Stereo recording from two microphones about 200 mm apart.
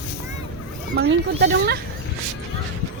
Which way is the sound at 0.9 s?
55° right (ahead or behind).